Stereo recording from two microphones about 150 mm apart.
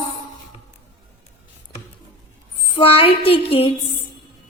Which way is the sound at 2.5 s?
35° left (ahead or behind).